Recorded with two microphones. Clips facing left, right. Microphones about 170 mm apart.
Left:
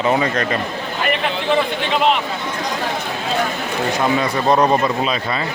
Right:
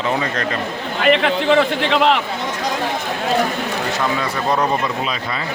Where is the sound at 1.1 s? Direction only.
75° right (ahead or behind).